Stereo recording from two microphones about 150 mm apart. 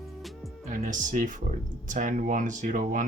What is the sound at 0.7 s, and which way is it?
Speech, 60° right (ahead or behind).